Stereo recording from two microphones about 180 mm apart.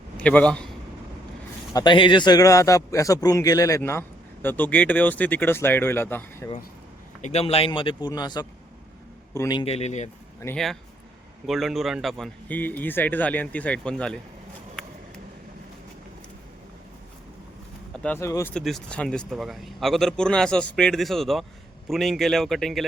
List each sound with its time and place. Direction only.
0.2 s a man's voice: 5° left (ahead or behind)
1.7 s a man's voice: 25° left (ahead or behind)
7.2 s a man's voice: 40° left (ahead or behind)
10.4 s a man's voice: 5° left (ahead or behind)
18.0 s a man's voice: 10° left (ahead or behind)
18.5 s speech: 5° left (ahead or behind)